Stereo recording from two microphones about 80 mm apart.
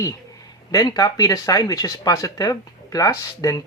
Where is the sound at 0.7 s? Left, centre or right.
Left.